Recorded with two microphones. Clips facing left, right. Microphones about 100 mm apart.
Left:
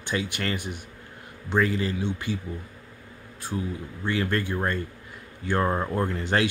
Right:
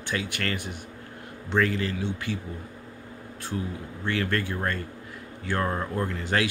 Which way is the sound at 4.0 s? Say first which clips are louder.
Left 1 dB; 20° left (ahead or behind).